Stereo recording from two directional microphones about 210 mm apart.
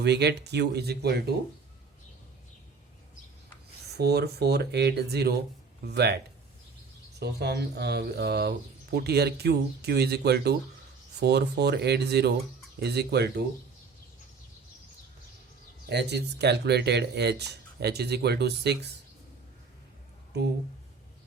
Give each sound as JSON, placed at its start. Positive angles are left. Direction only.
{"t": 0.0, "sound": "speech", "side_deg": -50}
{"t": 3.9, "sound": "speech", "side_deg": -50}
{"t": 7.2, "sound": "speech", "side_deg": -50}
{"t": 15.9, "sound": "speech", "side_deg": -55}